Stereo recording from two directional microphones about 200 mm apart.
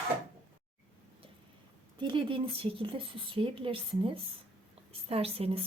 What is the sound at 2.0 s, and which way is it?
A woman's voice, 25° right (ahead or behind).